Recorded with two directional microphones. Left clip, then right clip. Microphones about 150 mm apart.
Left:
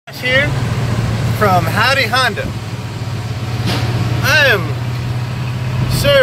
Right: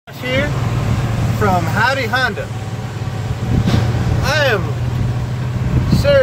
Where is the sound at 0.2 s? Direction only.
10° right (ahead or behind).